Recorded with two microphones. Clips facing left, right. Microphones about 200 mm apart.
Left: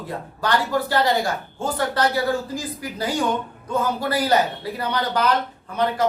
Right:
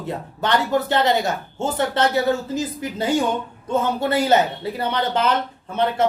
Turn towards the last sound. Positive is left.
turn(degrees=-25)  # may be behind; listen again after turning